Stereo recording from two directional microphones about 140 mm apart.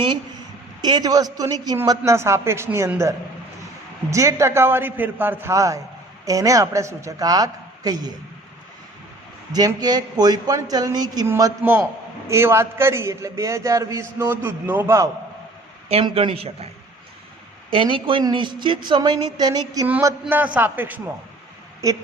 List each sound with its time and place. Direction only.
0.8 s a man's voice: 30° right (ahead or behind)
4.1 s a man's voice: 20° right (ahead or behind)
9.5 s a man's voice: 30° right (ahead or behind)
15.9 s a man's voice: 45° right (ahead or behind)
17.7 s speech: 35° right (ahead or behind)
20.2 s a man's voice: 10° right (ahead or behind)
21.8 s a man's voice: 25° right (ahead or behind)